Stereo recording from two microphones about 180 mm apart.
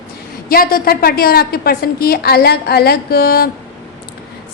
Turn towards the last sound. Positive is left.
turn(degrees=55)  # may be behind; listen again after turning